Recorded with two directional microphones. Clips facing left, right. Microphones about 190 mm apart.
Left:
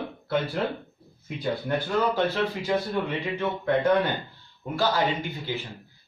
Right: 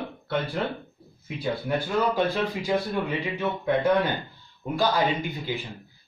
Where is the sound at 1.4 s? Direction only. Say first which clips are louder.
Even; 10° right (ahead or behind).